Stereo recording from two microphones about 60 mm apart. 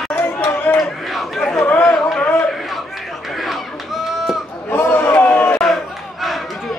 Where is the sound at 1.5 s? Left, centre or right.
Left.